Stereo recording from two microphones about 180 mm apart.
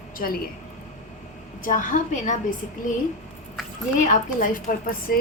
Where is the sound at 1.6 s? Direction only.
45° left (ahead or behind).